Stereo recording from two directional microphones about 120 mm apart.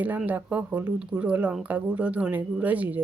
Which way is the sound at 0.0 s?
15° right (ahead or behind).